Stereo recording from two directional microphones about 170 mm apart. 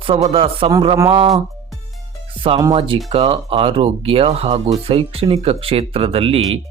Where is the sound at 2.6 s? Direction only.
30° right (ahead or behind).